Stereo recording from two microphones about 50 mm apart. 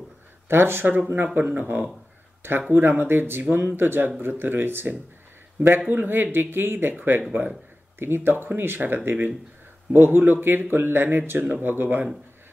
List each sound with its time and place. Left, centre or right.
0.5 s speech: right